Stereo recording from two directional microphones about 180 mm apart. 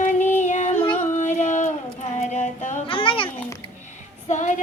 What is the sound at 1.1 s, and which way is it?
Female singing, 45° left (ahead or behind).